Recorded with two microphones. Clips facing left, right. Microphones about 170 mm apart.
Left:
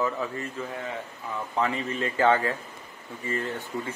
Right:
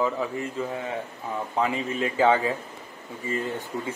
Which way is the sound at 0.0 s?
15° right (ahead or behind).